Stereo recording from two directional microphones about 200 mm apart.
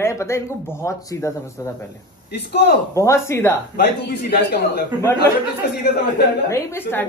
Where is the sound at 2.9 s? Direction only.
15° left (ahead or behind).